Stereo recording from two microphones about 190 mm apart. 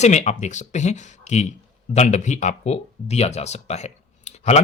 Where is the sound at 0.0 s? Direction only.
35° left (ahead or behind).